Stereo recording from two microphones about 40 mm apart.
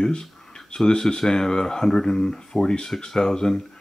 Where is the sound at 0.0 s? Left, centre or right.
Left.